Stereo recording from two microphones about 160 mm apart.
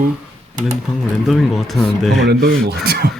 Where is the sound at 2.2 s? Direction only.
90° right.